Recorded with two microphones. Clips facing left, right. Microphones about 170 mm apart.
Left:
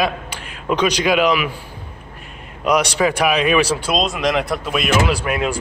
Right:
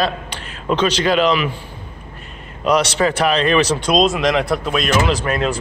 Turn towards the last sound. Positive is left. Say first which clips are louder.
# right 1 dB
turn(degrees=10)  # may be behind; listen again after turning